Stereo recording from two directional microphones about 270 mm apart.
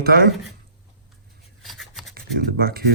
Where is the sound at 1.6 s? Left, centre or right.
Centre.